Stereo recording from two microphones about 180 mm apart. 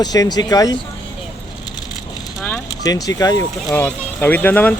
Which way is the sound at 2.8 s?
20° left (ahead or behind).